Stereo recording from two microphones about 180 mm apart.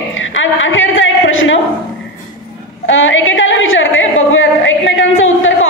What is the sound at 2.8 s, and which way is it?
Female singing, 90° left.